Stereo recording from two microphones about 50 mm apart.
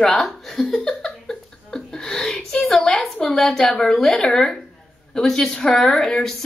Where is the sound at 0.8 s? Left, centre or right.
Centre.